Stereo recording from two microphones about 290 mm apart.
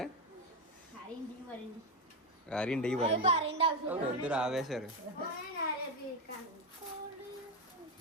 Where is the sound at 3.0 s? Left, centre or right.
Right.